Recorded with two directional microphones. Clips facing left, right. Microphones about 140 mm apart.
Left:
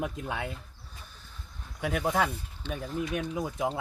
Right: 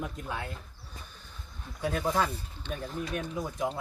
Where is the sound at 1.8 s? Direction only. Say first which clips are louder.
Left 1 dB; 80° left.